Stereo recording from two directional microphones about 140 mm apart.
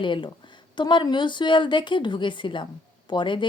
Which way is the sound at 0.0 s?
35° left (ahead or behind).